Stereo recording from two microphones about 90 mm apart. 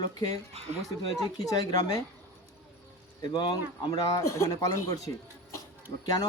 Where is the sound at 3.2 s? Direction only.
50° left (ahead or behind).